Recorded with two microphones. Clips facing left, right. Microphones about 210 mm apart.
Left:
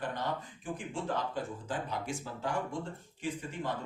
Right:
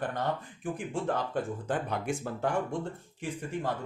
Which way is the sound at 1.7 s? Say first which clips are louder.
Right 6 dB; 60° right (ahead or behind).